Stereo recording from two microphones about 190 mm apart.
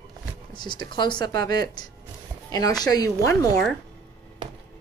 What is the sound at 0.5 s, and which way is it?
Speech, 25° left (ahead or behind).